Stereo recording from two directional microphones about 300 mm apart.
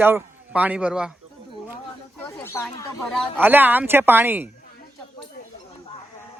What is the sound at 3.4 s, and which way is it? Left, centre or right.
A man's voice, centre.